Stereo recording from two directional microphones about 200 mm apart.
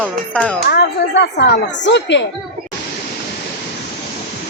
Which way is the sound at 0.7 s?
55° left (ahead or behind).